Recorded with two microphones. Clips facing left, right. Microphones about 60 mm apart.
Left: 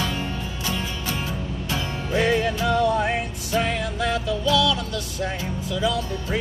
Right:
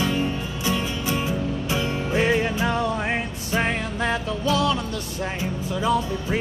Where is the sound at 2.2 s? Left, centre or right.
Right.